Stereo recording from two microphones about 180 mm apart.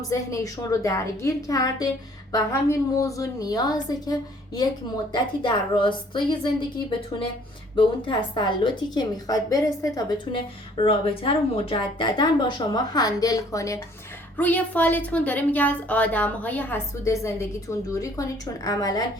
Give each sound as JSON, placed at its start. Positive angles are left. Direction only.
{"t": 0.1, "sound": "a woman's voice", "side_deg": 15}
{"t": 7.8, "sound": "a woman's voice", "side_deg": 25}
{"t": 10.8, "sound": "a woman's voice", "side_deg": 30}